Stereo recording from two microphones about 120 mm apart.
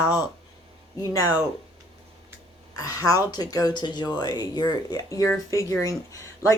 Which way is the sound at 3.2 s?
35° left (ahead or behind).